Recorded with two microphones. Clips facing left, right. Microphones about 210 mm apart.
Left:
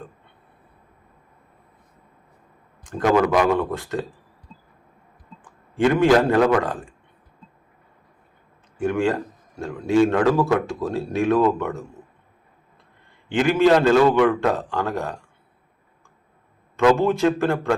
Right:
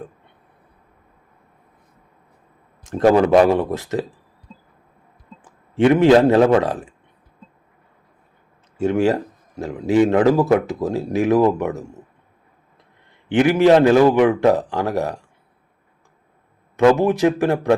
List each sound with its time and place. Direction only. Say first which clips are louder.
2.8 s a man's voice: right 4 dB; 25° right (ahead or behind)
5.8 s speech: right 4 dB; 20° right (ahead or behind)
8.8 s a man's voice: right 4 dB; 20° right (ahead or behind)
13.3 s a man's voice: right 4 dB; 20° right (ahead or behind)
16.7 s a man's voice: right 3 dB; 20° right (ahead or behind)